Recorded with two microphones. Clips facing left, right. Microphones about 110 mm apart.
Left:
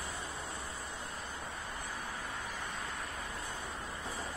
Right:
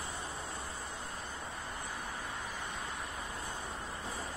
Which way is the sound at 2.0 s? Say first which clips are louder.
Even; 15° right (ahead or behind).